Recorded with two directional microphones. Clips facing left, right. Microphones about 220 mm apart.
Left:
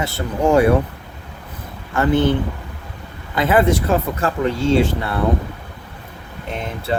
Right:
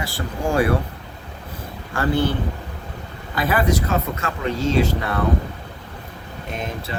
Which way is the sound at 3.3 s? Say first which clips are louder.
Left 5 dB; 25° left (ahead or behind).